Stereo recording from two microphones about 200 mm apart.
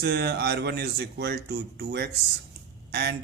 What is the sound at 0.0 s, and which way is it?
Speech, 55° right (ahead or behind).